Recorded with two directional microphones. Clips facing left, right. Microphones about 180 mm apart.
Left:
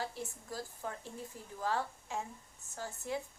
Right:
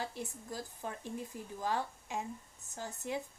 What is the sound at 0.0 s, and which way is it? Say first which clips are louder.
A woman's voice: even; 15° right (ahead or behind).